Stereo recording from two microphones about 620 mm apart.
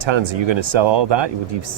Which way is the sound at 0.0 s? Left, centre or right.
Right.